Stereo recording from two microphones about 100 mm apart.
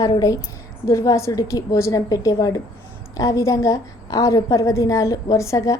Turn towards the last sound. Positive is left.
turn(degrees=30)  # may be behind; listen again after turning